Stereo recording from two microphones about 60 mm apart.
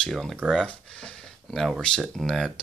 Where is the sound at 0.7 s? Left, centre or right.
Centre.